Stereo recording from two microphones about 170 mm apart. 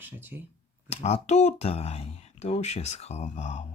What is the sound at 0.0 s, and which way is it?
Speech, 10° right (ahead or behind).